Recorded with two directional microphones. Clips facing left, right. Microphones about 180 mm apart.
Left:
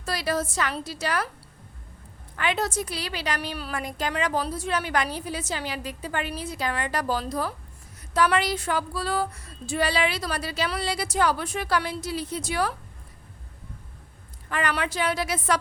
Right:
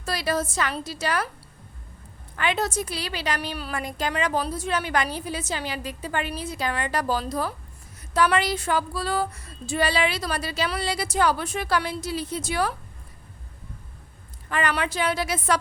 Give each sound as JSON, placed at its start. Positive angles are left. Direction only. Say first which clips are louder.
{"t": 0.0, "sound": "speech", "louder": "right 1 dB", "side_deg": -25}
{"t": 2.3, "sound": "speech", "louder": "right 1 dB", "side_deg": -25}
{"t": 14.5, "sound": "speech", "louder": "right 2 dB", "side_deg": -25}